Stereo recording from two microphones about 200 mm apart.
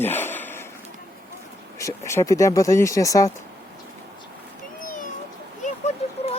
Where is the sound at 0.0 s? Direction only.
10° left (ahead or behind).